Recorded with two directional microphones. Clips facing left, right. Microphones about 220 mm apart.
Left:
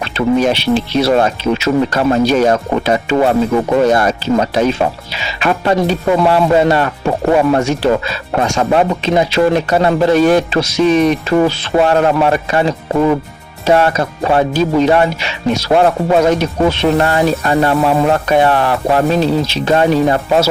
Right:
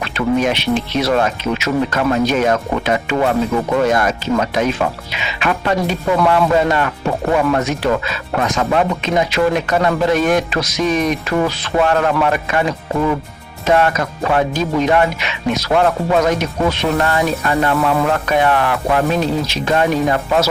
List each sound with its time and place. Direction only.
0.0 s music: 30° left (ahead or behind)